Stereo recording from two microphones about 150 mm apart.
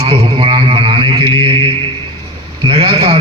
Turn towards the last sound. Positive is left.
turn(degrees=-40)  # may be behind; listen again after turning